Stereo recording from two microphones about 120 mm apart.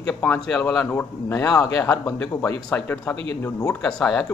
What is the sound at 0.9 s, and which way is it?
Speech, 20° left (ahead or behind).